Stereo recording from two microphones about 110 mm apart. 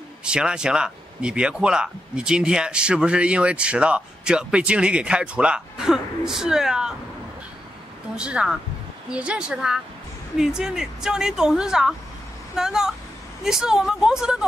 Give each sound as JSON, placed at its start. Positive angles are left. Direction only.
{"t": 0.2, "sound": "speech", "side_deg": -10}
{"t": 8.2, "sound": "speech", "side_deg": -10}